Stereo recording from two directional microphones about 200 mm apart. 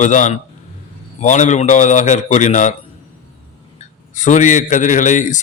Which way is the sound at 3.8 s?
40° left (ahead or behind).